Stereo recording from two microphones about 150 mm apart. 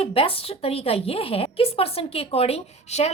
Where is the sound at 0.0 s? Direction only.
40° left (ahead or behind).